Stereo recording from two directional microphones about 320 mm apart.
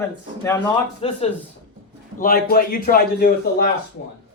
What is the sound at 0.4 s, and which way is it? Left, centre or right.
Speech, centre.